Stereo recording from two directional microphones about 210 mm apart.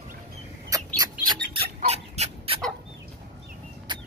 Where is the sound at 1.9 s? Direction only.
30° right (ahead or behind).